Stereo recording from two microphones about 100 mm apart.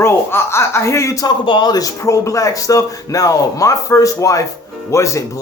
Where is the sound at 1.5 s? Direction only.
50° left (ahead or behind).